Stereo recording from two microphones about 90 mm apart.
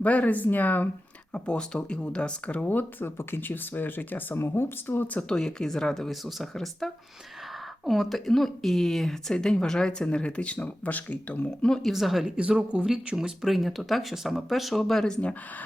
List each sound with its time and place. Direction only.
0.0 s speech: 15° left (ahead or behind)
5.3 s speech: 5° left (ahead or behind)
12.4 s speech: 10° right (ahead or behind); by 15.4 s 10° left (ahead or behind)